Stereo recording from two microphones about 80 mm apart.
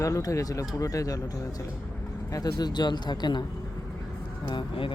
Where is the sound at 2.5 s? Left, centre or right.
Left.